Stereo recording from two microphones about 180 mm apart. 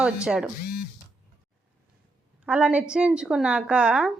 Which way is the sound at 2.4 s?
5° right (ahead or behind).